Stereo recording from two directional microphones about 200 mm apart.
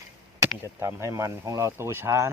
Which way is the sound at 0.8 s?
15° right (ahead or behind).